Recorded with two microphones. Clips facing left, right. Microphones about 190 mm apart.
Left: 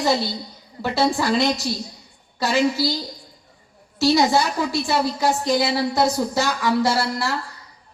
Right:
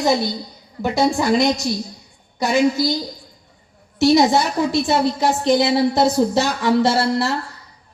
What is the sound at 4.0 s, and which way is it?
A woman's voice, 20° right (ahead or behind).